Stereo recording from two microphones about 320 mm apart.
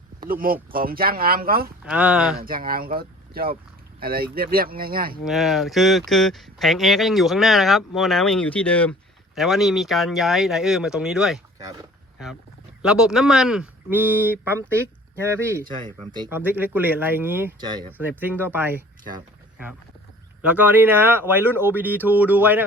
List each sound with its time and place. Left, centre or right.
0.2 s speech: right
1.8 s speech: centre
2.4 s speech: right
5.2 s speech: centre
12.8 s speech: centre
20.4 s speech: centre